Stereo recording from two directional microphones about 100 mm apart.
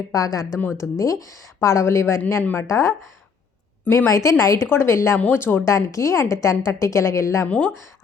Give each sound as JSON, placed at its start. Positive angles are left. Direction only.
{"t": 0.1, "sound": "a woman's voice", "side_deg": 35}
{"t": 2.6, "sound": "a woman's voice", "side_deg": 30}
{"t": 5.6, "sound": "a woman's voice", "side_deg": 30}
{"t": 7.4, "sound": "speech", "side_deg": 15}